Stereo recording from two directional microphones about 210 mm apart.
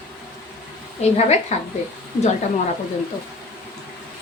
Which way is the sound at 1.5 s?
30° left (ahead or behind).